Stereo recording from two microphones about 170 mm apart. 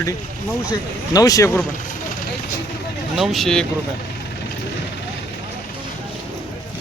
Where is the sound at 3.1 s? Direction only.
Centre (ahead or behind).